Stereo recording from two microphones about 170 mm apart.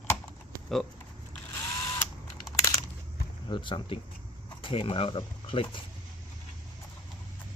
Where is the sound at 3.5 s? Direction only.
30° left (ahead or behind).